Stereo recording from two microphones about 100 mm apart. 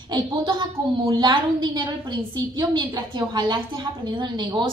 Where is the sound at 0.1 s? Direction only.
50° right (ahead or behind).